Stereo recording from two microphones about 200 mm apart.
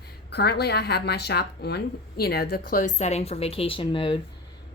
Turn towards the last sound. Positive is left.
turn(degrees=25)  # may be behind; listen again after turning